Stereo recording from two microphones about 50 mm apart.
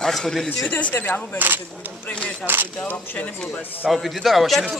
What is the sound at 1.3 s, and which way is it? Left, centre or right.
Speech, right.